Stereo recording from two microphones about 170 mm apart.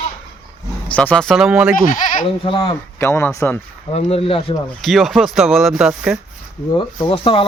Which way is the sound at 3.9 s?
40° left (ahead or behind).